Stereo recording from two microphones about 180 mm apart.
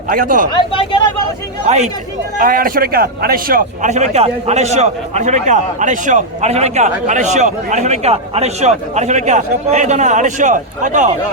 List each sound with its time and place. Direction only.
0.1 s speech: 50° right (ahead or behind)
0.5 s speech: 25° left (ahead or behind)
1.6 s a man's voice: 40° right (ahead or behind)
2.4 s a man's voice: 50° right (ahead or behind)